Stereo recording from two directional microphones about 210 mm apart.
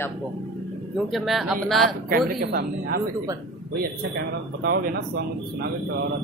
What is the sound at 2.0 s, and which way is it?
Speech, 45° right (ahead or behind).